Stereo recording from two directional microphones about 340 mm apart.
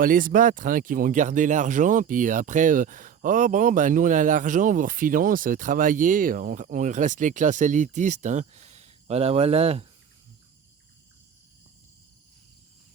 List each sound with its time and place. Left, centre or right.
0.0 s speech: right